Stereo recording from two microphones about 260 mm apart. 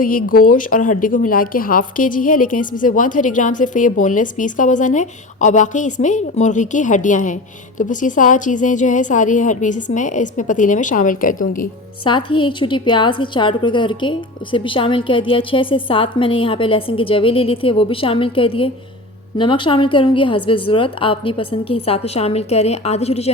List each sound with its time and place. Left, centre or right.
0.0 s a woman's voice: left
12.0 s a woman's voice: centre